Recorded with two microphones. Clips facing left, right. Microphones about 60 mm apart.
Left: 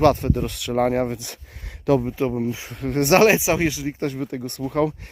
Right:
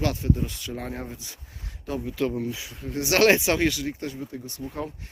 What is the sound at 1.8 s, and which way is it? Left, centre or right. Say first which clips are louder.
Speech: left 13 dB; left.